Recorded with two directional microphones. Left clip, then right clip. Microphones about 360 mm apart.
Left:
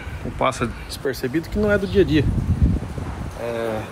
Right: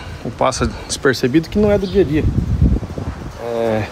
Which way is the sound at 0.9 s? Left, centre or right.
Right.